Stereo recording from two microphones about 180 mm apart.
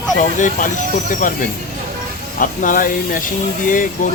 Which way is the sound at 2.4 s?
45° left (ahead or behind).